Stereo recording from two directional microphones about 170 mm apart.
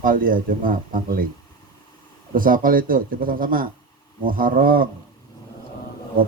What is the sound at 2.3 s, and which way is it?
A man's voice, 55° right (ahead or behind).